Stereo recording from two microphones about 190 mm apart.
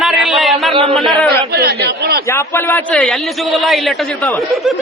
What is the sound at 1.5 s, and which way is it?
Speech, 55° right (ahead or behind).